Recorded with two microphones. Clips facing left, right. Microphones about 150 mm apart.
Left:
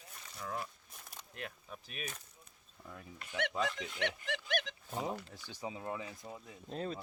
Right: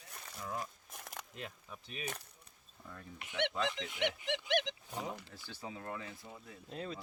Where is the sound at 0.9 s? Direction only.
90° right.